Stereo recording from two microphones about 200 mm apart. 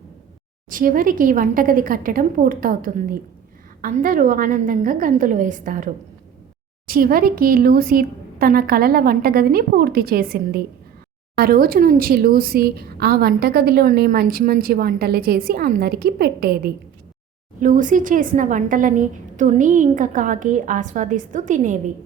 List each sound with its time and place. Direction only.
0.7 s a woman's voice: 45° right (ahead or behind)